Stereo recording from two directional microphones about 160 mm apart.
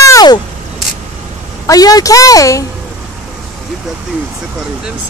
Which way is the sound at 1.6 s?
20° left (ahead or behind).